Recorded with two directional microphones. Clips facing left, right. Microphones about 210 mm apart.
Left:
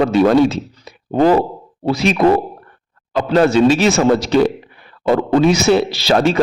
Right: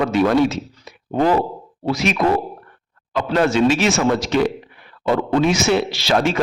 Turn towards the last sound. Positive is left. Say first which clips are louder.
# left 4 dB
turn(degrees=35)  # may be behind; listen again after turning